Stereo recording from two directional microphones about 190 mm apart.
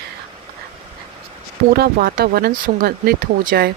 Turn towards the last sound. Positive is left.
turn(degrees=-55)  # may be behind; listen again after turning